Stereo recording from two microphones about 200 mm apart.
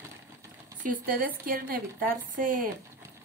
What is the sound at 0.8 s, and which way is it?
A woman's voice, 45° right (ahead or behind).